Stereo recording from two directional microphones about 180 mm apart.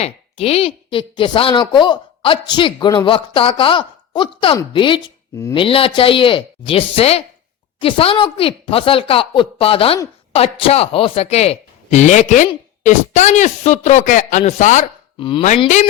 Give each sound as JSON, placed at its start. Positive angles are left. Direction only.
{"t": 0.0, "sound": "a woman's voice", "side_deg": 35}
{"t": 15.2, "sound": "a woman's voice", "side_deg": 30}